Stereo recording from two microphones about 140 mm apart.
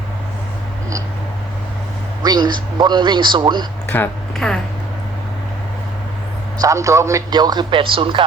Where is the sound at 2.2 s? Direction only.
30° right (ahead or behind).